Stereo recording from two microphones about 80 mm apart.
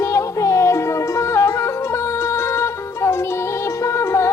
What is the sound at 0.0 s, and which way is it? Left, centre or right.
Music, left.